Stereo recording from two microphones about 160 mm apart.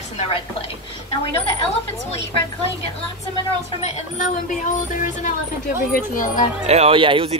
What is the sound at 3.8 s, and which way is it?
Speech, 45° left (ahead or behind).